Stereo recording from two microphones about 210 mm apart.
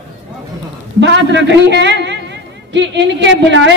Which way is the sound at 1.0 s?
55° right (ahead or behind).